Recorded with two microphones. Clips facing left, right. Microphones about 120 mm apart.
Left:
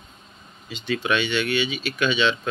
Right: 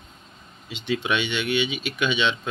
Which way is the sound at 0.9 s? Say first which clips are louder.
Left 1 dB; 20° right (ahead or behind).